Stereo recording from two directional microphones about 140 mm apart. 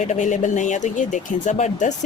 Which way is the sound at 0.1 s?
60° left (ahead or behind).